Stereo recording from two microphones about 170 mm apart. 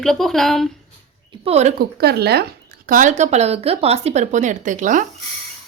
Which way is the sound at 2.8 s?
50° right (ahead or behind).